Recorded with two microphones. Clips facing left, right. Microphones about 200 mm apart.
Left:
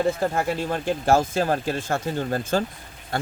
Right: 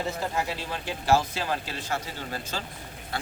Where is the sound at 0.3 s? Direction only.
50° left (ahead or behind).